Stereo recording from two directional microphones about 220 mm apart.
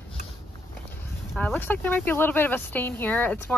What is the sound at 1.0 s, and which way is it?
Speech, 10° left (ahead or behind).